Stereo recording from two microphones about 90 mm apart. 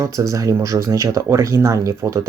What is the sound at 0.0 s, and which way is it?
Speech, 35° right (ahead or behind).